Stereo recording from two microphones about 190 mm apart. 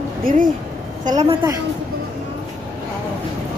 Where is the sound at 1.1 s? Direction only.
15° right (ahead or behind).